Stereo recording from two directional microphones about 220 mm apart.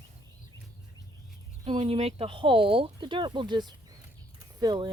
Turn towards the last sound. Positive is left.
turn(degrees=-20)  # may be behind; listen again after turning